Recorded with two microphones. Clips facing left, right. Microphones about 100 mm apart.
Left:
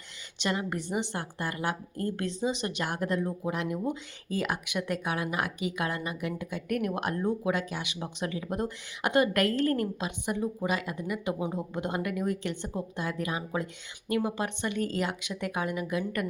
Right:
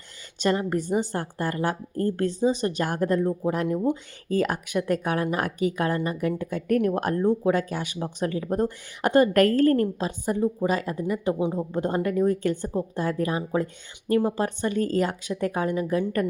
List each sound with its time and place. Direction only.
0.3 s speech: 40° right (ahead or behind)